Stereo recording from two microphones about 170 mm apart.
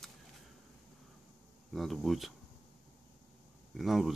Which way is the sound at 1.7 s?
Centre (ahead or behind).